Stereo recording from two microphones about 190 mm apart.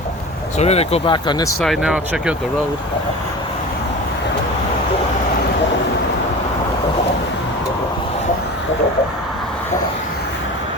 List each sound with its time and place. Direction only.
0.6 s speech: 35° left (ahead or behind)
1.6 s speech: centre (ahead or behind)